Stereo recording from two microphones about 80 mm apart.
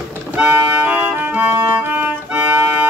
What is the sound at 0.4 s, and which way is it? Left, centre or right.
Music, centre.